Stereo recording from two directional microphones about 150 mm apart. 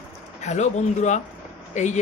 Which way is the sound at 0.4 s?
50° left (ahead or behind).